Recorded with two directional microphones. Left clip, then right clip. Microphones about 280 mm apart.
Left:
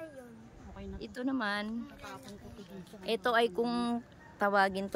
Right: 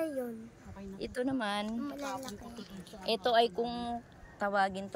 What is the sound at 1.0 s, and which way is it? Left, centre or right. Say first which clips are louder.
Speech: right 1 dB; centre.